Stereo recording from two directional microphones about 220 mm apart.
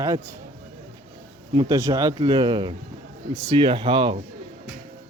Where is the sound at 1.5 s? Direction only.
15° right (ahead or behind).